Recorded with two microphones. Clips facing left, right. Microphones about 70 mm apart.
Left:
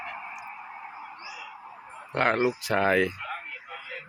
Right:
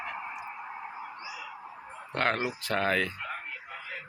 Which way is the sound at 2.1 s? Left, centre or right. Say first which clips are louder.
Left 5 dB; centre.